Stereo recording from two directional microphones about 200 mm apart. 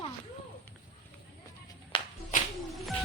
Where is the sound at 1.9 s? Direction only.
25° left (ahead or behind).